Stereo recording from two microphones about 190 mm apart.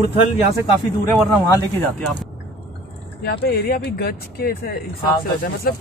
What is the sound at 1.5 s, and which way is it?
Speech, 10° left (ahead or behind).